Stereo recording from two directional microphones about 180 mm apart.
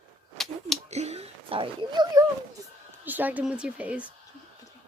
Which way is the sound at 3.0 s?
10° right (ahead or behind).